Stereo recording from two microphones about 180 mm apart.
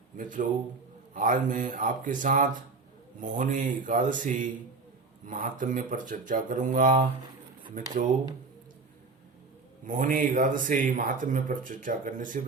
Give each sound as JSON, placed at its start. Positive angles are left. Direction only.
{"t": 0.2, "sound": "speech", "side_deg": -45}
{"t": 9.8, "sound": "speech", "side_deg": -50}